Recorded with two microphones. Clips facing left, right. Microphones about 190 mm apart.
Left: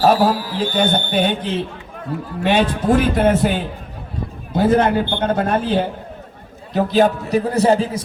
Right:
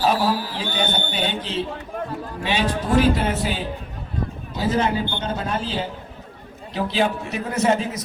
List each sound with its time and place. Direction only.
0.0 s a man's voice: 50° left (ahead or behind)
6.7 s a man's voice: 45° left (ahead or behind)